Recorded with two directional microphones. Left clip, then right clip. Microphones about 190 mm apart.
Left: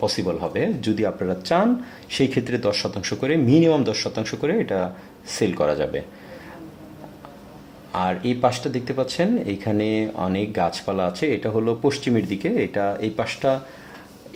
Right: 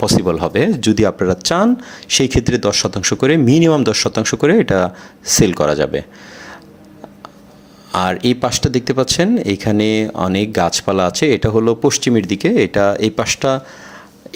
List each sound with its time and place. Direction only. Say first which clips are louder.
0.0 s speech: right 8 dB; 40° right (ahead or behind)
7.9 s speech: right 7 dB; 35° right (ahead or behind)